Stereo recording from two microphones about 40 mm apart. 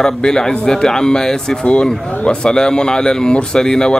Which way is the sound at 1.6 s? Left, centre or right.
Left.